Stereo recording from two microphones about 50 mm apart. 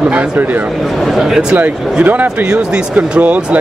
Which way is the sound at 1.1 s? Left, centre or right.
Centre.